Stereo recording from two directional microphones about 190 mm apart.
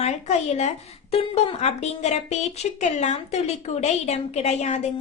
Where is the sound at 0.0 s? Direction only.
35° left (ahead or behind).